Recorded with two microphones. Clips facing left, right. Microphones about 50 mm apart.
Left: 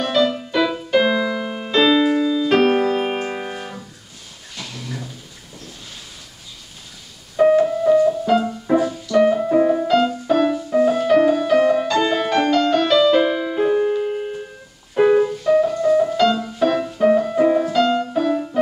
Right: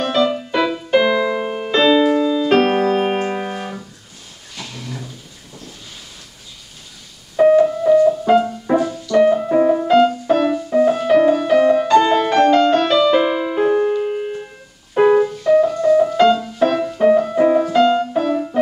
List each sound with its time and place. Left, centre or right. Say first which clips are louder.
0.0 s music: right 1 dB; centre
4.6 s a sound: even; centre
7.3 s music: right 3 dB; centre
9.2 s music: right 2 dB; centre
9.8 s music: right 4 dB; right
10.3 s music: left 3 dB; centre
12.4 s music: right 4 dB; right
12.8 s music: right 1 dB; centre
15.0 s piano: right 2 dB; centre
15.2 s music: right 2 dB; centre
17.7 s music: right 4 dB; right
18.1 s music: right 1 dB; centre